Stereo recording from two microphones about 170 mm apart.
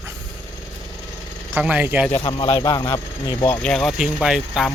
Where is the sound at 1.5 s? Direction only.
5° right (ahead or behind).